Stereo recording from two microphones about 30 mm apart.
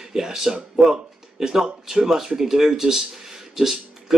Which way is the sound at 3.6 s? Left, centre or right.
Centre.